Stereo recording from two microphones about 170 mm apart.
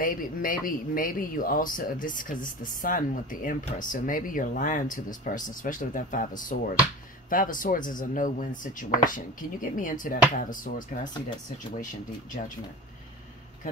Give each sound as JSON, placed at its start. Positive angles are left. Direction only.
{"t": 0.0, "sound": "speech", "side_deg": 55}